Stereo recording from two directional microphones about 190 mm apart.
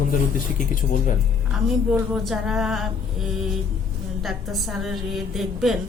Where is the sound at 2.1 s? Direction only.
Centre (ahead or behind).